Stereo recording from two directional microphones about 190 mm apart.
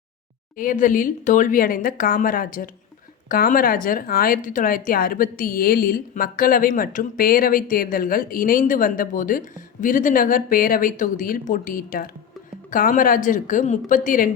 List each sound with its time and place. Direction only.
0.5 s speech: 45° left (ahead or behind)